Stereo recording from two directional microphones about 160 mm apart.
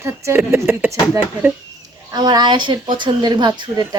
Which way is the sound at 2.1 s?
25° right (ahead or behind).